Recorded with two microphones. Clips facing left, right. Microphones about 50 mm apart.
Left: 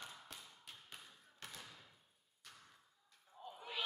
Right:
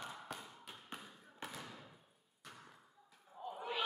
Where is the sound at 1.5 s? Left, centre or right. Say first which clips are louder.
Right 5 dB; right.